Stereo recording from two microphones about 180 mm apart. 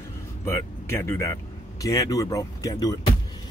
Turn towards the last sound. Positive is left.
turn(degrees=20)  # may be behind; listen again after turning